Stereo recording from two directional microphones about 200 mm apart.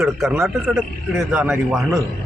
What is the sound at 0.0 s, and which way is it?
A man's voice, centre (ahead or behind).